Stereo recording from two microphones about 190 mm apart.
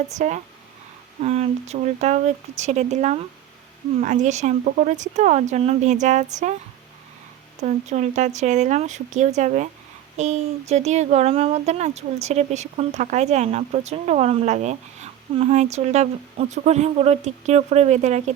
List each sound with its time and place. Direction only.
0.2 s speech: 40° right (ahead or behind)
7.6 s speech: 40° right (ahead or behind)